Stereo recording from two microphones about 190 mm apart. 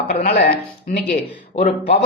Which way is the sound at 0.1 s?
55° left (ahead or behind).